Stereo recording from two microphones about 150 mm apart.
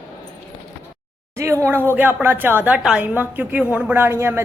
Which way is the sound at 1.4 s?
20° right (ahead or behind).